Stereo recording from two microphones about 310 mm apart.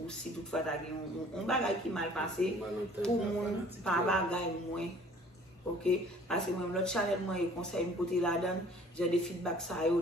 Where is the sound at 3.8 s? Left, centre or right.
Centre.